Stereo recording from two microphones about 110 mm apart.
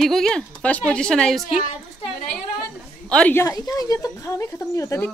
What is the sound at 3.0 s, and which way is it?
Speech, 10° left (ahead or behind).